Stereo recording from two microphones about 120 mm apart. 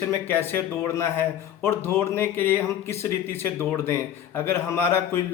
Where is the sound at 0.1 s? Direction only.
20° left (ahead or behind).